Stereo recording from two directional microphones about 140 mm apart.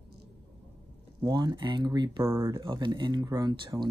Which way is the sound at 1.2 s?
30° right (ahead or behind).